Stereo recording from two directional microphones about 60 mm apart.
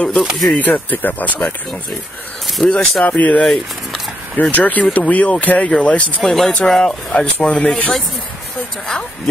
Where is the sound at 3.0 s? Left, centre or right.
Left.